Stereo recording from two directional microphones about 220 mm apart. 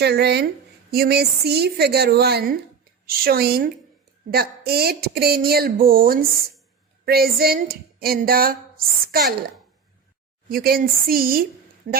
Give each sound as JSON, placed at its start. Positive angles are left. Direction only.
{"t": 0.0, "sound": "a woman's voice", "side_deg": -50}
{"t": 10.5, "sound": "a woman's voice", "side_deg": -40}